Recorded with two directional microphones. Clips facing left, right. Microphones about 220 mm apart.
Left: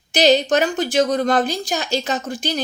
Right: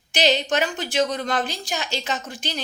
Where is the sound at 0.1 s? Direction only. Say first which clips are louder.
Left 6 dB; 40° left (ahead or behind).